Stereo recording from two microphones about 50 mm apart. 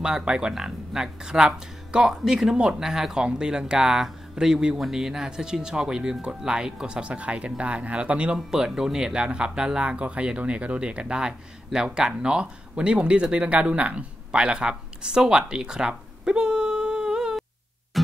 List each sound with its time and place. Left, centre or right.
0.0 s speech: centre
8.4 s speech: centre
17.9 s music: centre